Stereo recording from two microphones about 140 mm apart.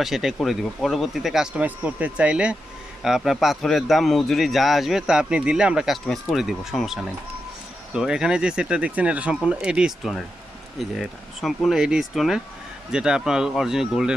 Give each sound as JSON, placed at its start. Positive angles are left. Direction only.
{"t": 0.0, "sound": "a man's voice", "side_deg": 0}